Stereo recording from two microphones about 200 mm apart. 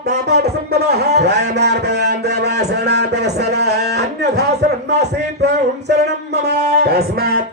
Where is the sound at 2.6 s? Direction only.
55° right (ahead or behind).